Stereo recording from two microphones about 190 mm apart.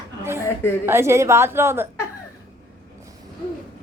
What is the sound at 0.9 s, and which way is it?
A woman's voice, 15° right (ahead or behind).